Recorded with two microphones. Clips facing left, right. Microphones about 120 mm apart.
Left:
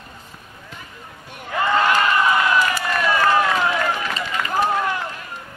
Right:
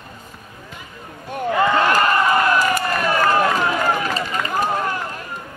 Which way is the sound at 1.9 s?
45° right (ahead or behind).